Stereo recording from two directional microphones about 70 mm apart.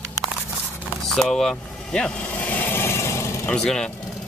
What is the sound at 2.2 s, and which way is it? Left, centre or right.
Vehicle, left.